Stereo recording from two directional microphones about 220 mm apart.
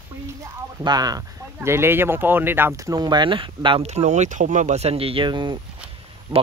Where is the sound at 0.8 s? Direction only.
20° right (ahead or behind).